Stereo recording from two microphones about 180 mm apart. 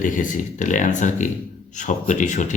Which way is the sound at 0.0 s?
45° left (ahead or behind).